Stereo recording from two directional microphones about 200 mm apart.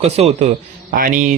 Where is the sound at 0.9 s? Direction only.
45° right (ahead or behind).